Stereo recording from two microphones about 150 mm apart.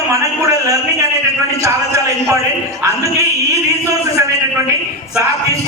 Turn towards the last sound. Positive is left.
turn(degrees=-20)  # may be behind; listen again after turning